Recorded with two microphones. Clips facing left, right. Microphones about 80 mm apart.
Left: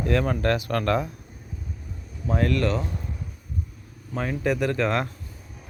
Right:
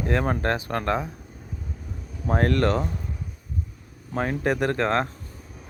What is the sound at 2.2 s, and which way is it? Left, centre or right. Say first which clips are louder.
Speech: right 2 dB; right.